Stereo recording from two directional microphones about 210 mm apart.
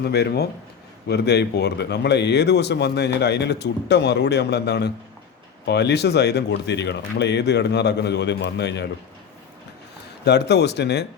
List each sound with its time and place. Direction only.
0.0 s speech: 50° left (ahead or behind)
10.2 s speech: 55° left (ahead or behind)